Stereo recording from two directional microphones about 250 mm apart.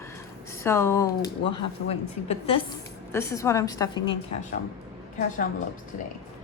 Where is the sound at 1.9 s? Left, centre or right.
Left.